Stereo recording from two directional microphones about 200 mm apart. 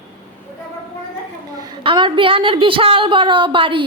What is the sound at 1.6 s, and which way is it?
A woman's voice, 20° right (ahead or behind).